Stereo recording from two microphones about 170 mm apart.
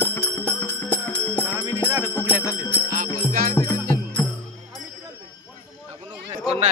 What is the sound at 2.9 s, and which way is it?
Music, 50° right (ahead or behind).